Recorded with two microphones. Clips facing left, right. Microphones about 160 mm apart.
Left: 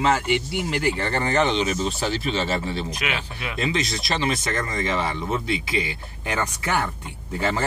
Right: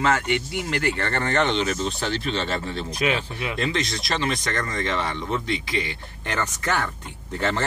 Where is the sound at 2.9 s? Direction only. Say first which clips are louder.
Right 5 dB; 35° right (ahead or behind).